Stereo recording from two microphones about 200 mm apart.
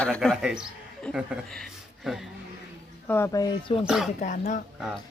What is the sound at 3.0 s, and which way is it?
Speech, 10° left (ahead or behind).